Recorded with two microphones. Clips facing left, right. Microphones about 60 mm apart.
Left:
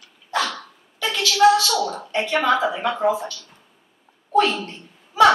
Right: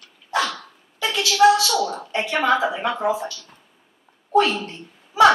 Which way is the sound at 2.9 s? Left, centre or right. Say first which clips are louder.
Left 2 dB; centre.